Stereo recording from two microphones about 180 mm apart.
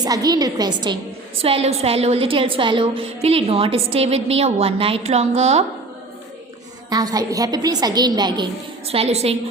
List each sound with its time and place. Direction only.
0.0 s a woman's voice: 20° right (ahead or behind); by 5.6 s 35° right (ahead or behind)
6.9 s a woman's voice: 20° right (ahead or behind)
8.9 s a woman's voice: 35° right (ahead or behind)